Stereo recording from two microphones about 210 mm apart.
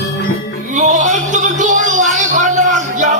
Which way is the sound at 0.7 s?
35° right (ahead or behind).